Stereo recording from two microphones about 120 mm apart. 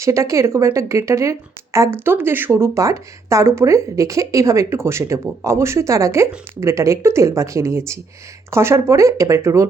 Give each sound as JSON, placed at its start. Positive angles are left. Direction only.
{"t": 0.0, "sound": "speech", "side_deg": -25}